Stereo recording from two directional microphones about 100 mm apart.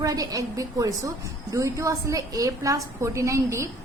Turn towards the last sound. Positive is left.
turn(degrees=-30)  # may be behind; listen again after turning